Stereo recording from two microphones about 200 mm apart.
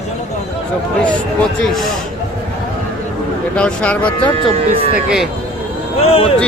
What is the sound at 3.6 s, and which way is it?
Speech, 5° left (ahead or behind).